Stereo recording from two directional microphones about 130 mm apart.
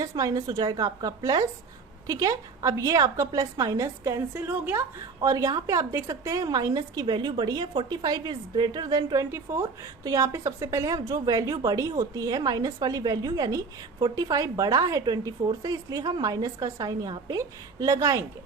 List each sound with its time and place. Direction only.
0.0 s speech: 30° right (ahead or behind)
5.3 s a woman's voice: 30° right (ahead or behind)
9.3 s speech: 20° right (ahead or behind)